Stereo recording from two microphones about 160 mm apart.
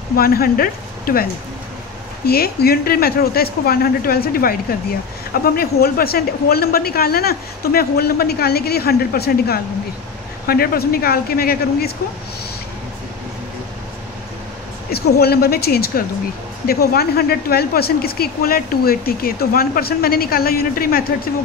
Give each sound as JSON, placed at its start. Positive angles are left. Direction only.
{"t": 0.1, "sound": "speech", "side_deg": 70}
{"t": 14.9, "sound": "speech", "side_deg": 80}